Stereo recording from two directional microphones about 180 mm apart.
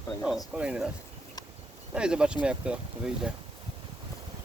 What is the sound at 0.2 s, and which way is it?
Speech, centre (ahead or behind).